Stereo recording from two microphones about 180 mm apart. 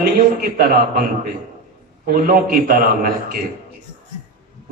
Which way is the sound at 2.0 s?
55° right (ahead or behind).